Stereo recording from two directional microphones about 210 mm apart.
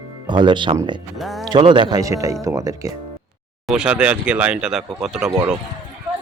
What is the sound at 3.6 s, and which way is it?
Speech, 5° right (ahead or behind).